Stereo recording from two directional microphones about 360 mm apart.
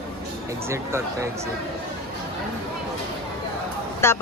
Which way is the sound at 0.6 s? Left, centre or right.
Centre.